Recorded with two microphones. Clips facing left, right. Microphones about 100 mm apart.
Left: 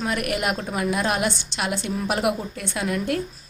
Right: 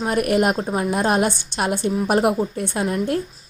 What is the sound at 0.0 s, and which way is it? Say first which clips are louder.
Speech: right 6 dB; 40° right (ahead or behind).